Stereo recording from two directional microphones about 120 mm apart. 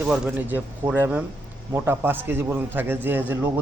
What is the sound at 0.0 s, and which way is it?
Speech, 10° right (ahead or behind).